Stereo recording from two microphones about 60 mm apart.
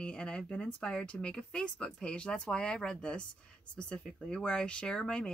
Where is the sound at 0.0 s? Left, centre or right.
Centre.